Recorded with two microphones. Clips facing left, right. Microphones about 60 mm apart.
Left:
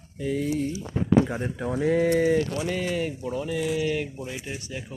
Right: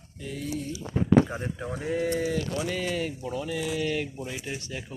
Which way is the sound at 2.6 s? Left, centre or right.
Centre.